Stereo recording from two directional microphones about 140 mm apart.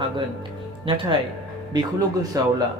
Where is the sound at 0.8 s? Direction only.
35° right (ahead or behind).